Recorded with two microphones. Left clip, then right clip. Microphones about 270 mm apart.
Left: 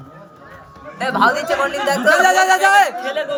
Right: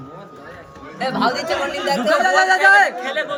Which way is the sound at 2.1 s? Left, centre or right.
Left.